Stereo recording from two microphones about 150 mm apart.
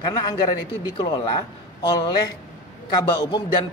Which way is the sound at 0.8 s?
30° left (ahead or behind).